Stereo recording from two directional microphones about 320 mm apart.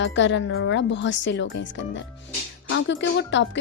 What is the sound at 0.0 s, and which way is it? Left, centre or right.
Speech, left.